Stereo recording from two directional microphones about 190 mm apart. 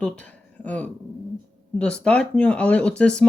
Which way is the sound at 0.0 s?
5° left (ahead or behind).